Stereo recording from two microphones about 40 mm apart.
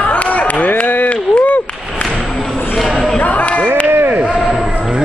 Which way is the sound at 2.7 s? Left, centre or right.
Centre.